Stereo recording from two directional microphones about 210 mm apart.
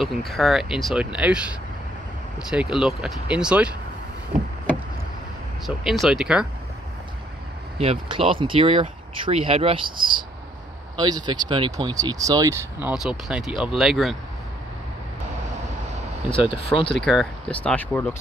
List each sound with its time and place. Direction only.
0.0 s speech: centre (ahead or behind)
5.9 s speech: centre (ahead or behind)
7.8 s speech: 25° right (ahead or behind)
12.8 s speech: 5° right (ahead or behind)
16.3 s speech: 25° left (ahead or behind)
16.9 s speech: centre (ahead or behind)